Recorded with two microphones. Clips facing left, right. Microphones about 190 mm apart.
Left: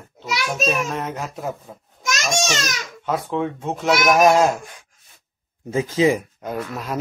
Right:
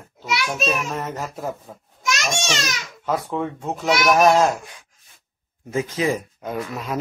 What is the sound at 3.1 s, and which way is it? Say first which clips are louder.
Speech: left 1 dB; centre (ahead or behind).